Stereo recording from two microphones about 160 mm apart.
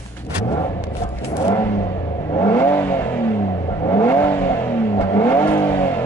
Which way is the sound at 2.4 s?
15° left (ahead or behind).